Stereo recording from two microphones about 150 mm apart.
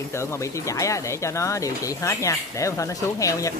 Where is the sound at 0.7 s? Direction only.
20° left (ahead or behind).